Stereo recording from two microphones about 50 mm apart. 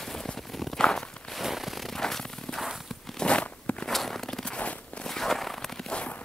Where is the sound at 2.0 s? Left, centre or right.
Centre.